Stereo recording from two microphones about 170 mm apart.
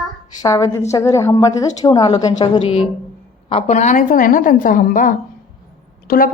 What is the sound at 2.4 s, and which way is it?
Speech, 35° left (ahead or behind).